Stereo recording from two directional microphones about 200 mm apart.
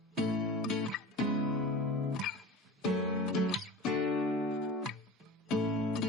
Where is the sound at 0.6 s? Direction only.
Centre (ahead or behind).